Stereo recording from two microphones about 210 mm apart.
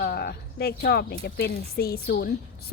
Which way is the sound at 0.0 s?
50° left (ahead or behind).